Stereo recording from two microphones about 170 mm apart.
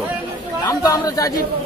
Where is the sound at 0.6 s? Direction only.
20° left (ahead or behind).